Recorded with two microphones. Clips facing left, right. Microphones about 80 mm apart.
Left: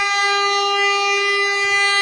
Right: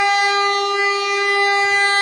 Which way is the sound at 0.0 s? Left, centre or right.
Right.